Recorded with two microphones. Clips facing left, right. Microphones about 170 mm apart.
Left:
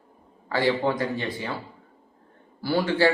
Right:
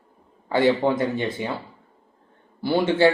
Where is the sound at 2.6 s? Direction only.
20° right (ahead or behind).